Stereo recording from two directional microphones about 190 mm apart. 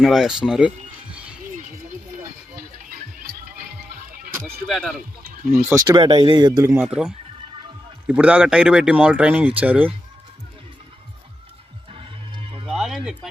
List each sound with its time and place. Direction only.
0.0 s speech: centre (ahead or behind)
4.4 s speech: centre (ahead or behind)
5.6 s speech: 15° right (ahead or behind)
6.0 s speech: 30° right (ahead or behind)
6.8 s speech: 5° right (ahead or behind)
11.9 s music: 30° right (ahead or behind)
12.7 s music: centre (ahead or behind)